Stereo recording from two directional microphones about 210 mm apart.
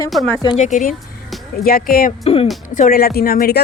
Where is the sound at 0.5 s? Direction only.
35° left (ahead or behind).